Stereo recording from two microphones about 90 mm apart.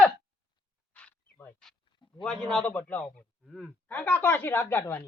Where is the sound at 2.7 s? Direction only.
20° left (ahead or behind).